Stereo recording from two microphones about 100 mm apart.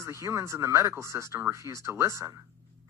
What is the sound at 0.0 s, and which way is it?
Speech, 30° right (ahead or behind).